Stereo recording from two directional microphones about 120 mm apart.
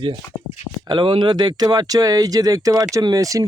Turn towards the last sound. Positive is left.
turn(degrees=-30)  # may be behind; listen again after turning